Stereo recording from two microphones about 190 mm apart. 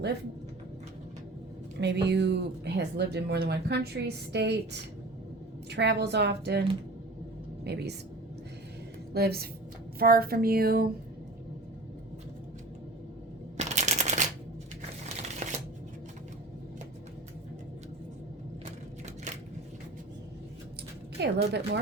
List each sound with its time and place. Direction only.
1.8 s speech: 60° right (ahead or behind)
9.1 s speech: 55° right (ahead or behind)
10.0 s a sound: 50° right (ahead or behind)
13.6 s a sound: 40° right (ahead or behind)
15.4 s shuffling cards: 40° right (ahead or behind)
21.2 s speech: 60° right (ahead or behind)